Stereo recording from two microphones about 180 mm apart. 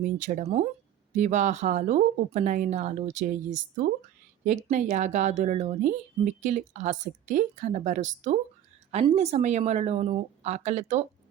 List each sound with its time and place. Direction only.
0.0 s a woman's voice: 45° right (ahead or behind)